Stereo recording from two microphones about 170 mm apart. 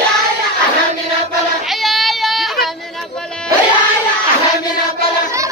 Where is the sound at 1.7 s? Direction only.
Centre (ahead or behind).